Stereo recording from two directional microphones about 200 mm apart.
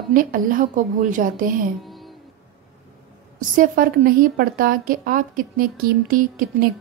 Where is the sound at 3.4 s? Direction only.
45° right (ahead or behind).